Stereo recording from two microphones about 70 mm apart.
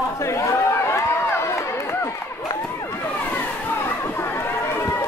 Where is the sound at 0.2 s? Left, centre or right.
Left.